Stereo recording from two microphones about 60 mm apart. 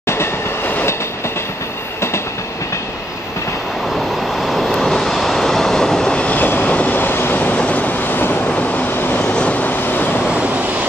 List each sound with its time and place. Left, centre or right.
0.0 s train: left
4.4 s vehicle: centre
6.1 s vehicle: left
7.5 s waves: left
8.5 s train: left
9.2 s train: centre
10.2 s vehicle: centre